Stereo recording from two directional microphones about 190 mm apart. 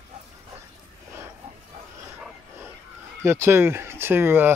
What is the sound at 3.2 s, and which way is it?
Speech, 15° right (ahead or behind).